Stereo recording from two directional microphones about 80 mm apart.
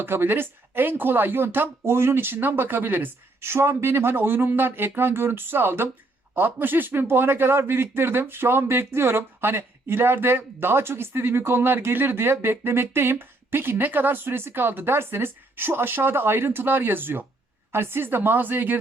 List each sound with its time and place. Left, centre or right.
0.0 s a man's voice: right